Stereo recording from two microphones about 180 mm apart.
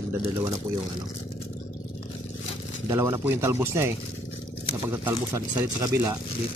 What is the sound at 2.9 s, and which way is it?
Speech, 15° right (ahead or behind).